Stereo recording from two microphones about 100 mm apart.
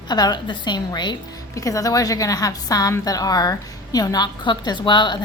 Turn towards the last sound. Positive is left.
turn(degrees=50)  # may be behind; listen again after turning